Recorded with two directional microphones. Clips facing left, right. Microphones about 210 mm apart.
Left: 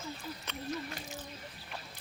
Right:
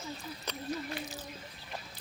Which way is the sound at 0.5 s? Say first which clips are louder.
Right 6 dB; 35° right (ahead or behind).